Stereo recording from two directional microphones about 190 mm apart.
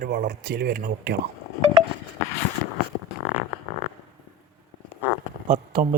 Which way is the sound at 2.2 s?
15° left (ahead or behind).